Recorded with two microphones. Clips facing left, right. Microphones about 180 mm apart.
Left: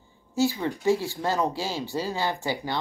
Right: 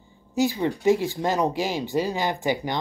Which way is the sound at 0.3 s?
15° right (ahead or behind).